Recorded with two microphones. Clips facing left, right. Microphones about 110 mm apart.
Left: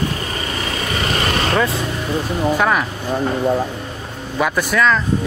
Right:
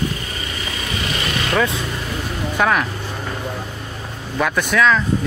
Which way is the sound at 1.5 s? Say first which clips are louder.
Left 1 dB; centre (ahead or behind).